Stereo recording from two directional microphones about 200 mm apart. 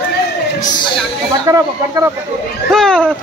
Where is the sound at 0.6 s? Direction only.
25° left (ahead or behind).